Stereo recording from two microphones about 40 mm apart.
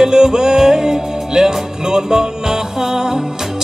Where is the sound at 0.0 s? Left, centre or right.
Centre.